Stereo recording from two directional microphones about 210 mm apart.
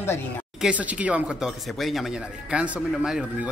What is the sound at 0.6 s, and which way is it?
Speech, 5° right (ahead or behind).